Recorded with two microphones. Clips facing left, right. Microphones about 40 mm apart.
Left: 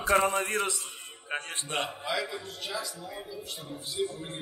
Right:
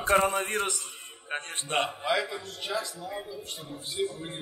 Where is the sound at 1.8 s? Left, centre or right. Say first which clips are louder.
Right 5 dB; centre.